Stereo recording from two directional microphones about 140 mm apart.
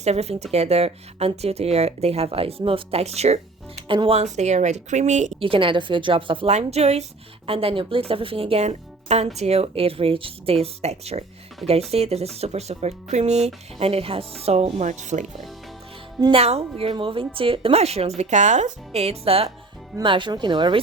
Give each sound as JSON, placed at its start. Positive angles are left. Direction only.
{"t": 0.0, "sound": "speech", "side_deg": -50}
{"t": 3.8, "sound": "speech", "side_deg": -40}
{"t": 5.4, "sound": "a woman's voice", "side_deg": -40}
{"t": 16.2, "sound": "a woman's voice", "side_deg": -45}